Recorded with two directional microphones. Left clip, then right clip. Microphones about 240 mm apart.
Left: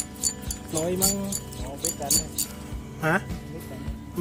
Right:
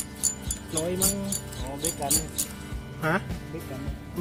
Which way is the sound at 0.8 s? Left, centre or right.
Centre.